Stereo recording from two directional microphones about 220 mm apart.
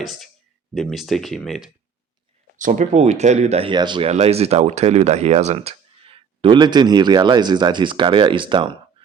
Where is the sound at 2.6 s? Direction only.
35° right (ahead or behind).